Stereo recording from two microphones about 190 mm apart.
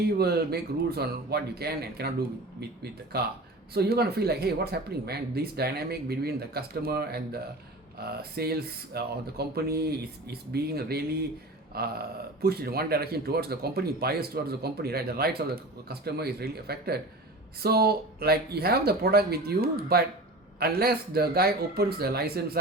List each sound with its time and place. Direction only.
0.0 s speech: 55° right (ahead or behind)